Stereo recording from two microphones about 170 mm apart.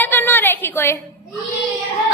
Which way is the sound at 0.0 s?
10° left (ahead or behind).